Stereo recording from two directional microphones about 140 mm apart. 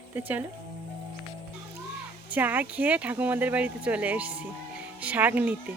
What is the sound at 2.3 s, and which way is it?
Speech, 10° right (ahead or behind).